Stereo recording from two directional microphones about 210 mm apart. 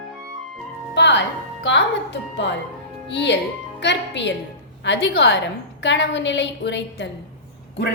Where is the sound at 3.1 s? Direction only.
55° left (ahead or behind).